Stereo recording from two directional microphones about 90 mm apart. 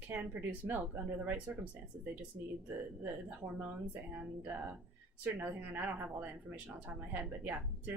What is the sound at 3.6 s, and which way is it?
Speech, 20° right (ahead or behind).